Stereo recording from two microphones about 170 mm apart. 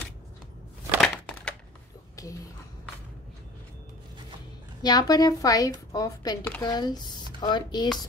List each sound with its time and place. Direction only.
1.0 s crushing: 5° left (ahead or behind)
2.2 s a sound: 20° left (ahead or behind)
4.8 s speech: 20° left (ahead or behind)